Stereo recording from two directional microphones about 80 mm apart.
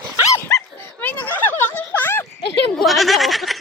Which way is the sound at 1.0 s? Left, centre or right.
Centre.